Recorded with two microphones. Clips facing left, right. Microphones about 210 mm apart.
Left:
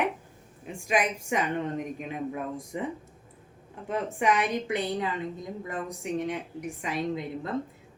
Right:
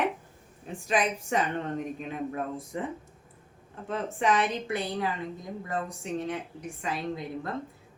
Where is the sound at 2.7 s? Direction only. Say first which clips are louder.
Left 1 dB; 15° left (ahead or behind).